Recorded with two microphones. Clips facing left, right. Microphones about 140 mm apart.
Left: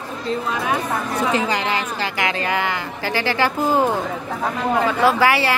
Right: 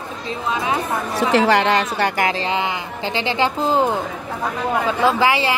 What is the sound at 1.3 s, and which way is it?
Speech, 70° right (ahead or behind).